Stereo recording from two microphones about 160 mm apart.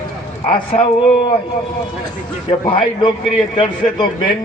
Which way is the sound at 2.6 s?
30° left (ahead or behind).